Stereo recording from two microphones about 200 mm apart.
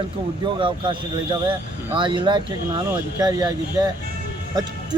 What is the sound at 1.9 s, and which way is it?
Speech, 25° right (ahead or behind).